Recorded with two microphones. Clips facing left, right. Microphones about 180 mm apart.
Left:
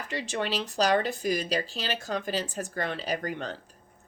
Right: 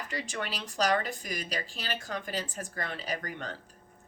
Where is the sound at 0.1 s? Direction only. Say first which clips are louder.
Left 8 dB; 30° left (ahead or behind).